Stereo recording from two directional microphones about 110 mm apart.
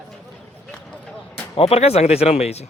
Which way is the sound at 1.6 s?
70° left (ahead or behind).